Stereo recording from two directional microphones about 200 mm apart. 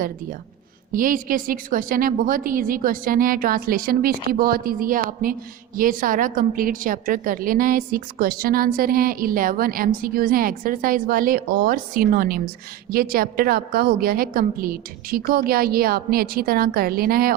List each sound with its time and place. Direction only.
0.9 s a woman's voice: 45° right (ahead or behind)